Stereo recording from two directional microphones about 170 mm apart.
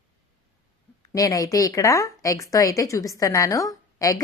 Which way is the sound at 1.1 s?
20° left (ahead or behind).